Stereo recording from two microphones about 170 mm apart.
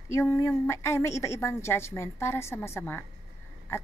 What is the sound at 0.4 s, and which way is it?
Speech, 15° left (ahead or behind).